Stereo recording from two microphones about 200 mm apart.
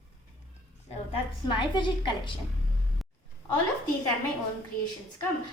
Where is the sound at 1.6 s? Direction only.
25° left (ahead or behind).